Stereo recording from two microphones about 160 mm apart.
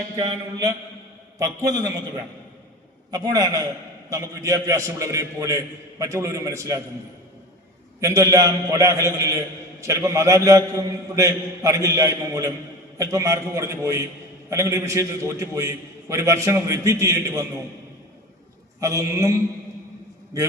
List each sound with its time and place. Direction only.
1.4 s a man's voice: 20° right (ahead or behind)
3.1 s a man's voice: 25° right (ahead or behind)
8.0 s a man's voice: 20° right (ahead or behind)
18.8 s a man's voice: 20° right (ahead or behind)